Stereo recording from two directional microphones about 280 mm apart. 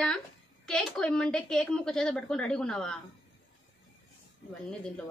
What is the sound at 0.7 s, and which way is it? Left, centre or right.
Speech, centre.